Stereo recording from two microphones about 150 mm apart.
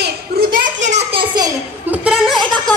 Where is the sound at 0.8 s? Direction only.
45° right (ahead or behind).